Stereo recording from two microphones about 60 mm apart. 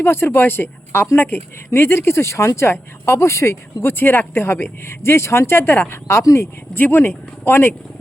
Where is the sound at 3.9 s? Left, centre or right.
Left.